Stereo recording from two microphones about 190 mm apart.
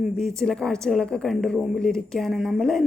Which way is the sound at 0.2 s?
Centre (ahead or behind).